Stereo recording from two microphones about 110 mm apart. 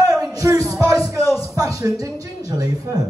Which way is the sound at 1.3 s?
30° right (ahead or behind).